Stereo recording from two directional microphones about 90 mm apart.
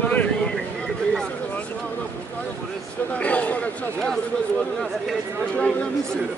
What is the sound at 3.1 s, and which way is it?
Speech, 15° left (ahead or behind).